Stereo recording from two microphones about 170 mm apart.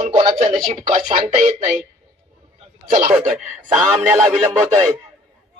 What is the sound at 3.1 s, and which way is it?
A man's voice, 5° right (ahead or behind).